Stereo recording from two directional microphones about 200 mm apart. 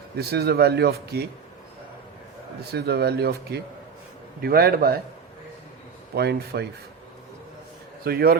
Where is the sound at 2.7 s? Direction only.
55° right (ahead or behind).